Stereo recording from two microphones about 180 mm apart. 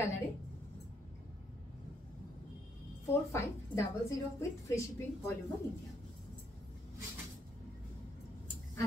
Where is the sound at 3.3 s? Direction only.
15° left (ahead or behind).